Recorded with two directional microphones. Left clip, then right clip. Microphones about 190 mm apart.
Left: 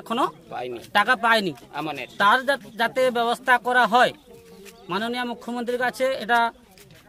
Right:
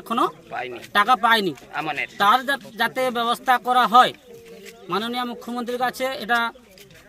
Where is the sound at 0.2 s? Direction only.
30° left (ahead or behind).